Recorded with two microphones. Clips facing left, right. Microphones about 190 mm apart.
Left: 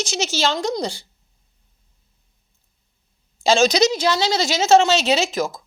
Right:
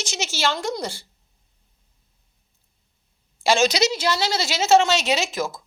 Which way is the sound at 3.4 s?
15° left (ahead or behind).